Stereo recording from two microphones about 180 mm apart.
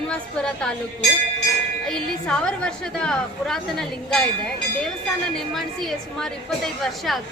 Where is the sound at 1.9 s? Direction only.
5° left (ahead or behind).